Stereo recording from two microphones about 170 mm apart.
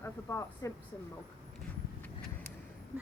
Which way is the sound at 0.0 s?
15° left (ahead or behind).